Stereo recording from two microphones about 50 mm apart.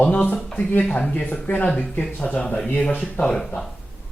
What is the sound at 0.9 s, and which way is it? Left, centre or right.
Speech, left.